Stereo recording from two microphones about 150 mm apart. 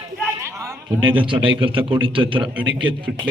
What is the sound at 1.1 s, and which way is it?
A man's voice, 35° right (ahead or behind).